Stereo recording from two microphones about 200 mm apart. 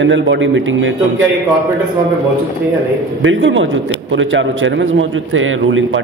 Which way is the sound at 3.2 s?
65° right (ahead or behind).